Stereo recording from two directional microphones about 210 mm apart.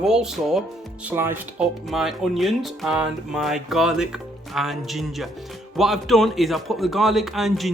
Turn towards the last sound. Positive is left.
turn(degrees=0)  # may be behind; listen again after turning